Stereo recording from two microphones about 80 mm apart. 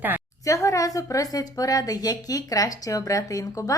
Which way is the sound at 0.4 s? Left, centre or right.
Left.